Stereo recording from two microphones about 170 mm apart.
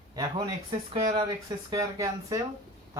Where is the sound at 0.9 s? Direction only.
25° right (ahead or behind).